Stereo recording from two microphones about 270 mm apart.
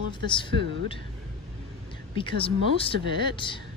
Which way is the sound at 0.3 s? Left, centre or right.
Centre.